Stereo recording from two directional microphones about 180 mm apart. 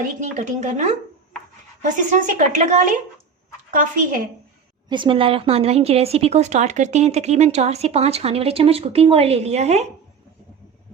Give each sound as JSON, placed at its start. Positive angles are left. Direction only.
{"t": 0.2, "sound": "a woman's voice", "side_deg": -40}
{"t": 4.9, "sound": "a woman's voice", "side_deg": -25}